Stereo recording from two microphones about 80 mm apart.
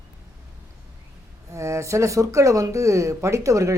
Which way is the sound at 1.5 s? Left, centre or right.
Right.